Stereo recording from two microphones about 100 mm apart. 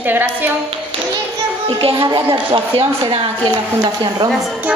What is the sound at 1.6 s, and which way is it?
Speech, 65° right (ahead or behind).